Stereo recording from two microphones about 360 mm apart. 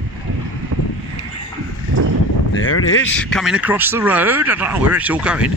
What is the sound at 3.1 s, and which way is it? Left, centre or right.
Speech, centre.